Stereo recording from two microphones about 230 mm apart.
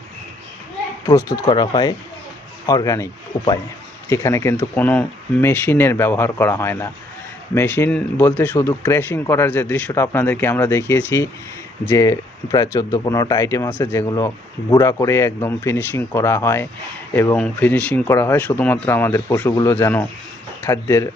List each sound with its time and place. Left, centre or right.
1.0 s speech: centre